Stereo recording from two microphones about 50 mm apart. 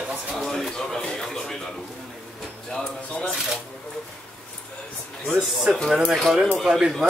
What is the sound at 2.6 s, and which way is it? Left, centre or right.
Speech, centre.